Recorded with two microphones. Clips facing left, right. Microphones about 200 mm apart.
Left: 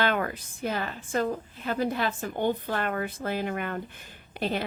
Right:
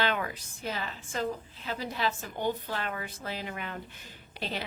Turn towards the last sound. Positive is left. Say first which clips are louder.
# left 7 dB
turn(degrees=50)  # may be behind; listen again after turning